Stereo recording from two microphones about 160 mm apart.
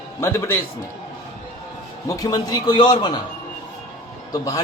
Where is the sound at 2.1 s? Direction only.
25° left (ahead or behind).